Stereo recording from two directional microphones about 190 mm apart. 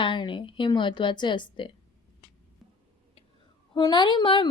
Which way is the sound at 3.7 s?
25° left (ahead or behind).